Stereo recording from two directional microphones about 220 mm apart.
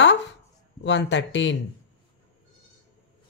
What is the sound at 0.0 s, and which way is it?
Chopping, 55° left (ahead or behind).